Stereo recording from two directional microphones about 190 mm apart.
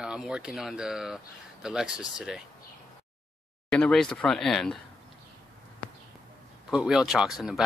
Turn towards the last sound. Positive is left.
turn(degrees=0)  # may be behind; listen again after turning